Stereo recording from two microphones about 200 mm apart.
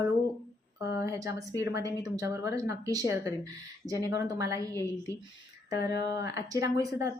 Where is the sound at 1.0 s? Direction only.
15° right (ahead or behind).